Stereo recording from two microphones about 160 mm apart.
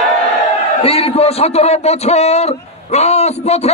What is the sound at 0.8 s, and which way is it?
A man's voice, 35° left (ahead or behind).